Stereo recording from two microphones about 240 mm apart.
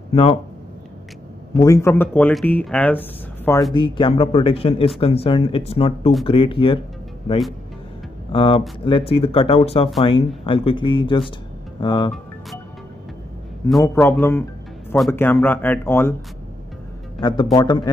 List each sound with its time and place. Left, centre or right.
0.1 s speech: left
1.6 s speech: centre
3.7 s speech: centre
8.3 s speech: left
13.8 s speech: centre
17.2 s speech: centre